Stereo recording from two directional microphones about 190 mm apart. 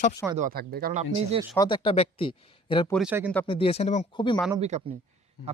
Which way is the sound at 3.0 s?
5° right (ahead or behind).